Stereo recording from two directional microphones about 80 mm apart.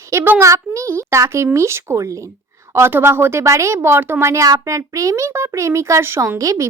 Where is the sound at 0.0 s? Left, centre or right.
Right.